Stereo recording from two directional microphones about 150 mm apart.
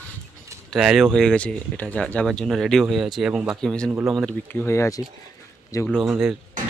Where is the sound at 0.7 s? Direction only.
Centre (ahead or behind).